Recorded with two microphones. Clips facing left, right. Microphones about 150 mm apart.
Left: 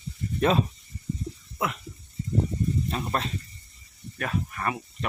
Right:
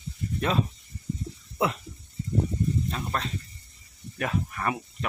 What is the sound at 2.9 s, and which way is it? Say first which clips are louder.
Speech: left 2 dB; 15° left (ahead or behind).